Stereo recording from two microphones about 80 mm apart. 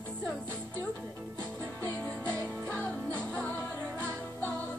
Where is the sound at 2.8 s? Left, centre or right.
Centre.